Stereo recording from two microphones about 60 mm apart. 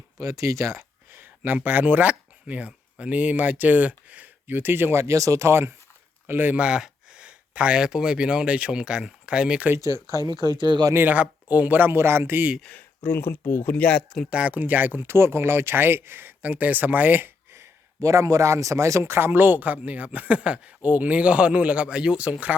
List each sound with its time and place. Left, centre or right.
0.2 s speech: right
1.1 s speech: right
5.1 s speech: right
6.2 s speech: right
6.6 s speech: centre
9.7 s speech: right
10.9 s speech: right
13.1 s speech: left
13.7 s speech: left
14.3 s speech: right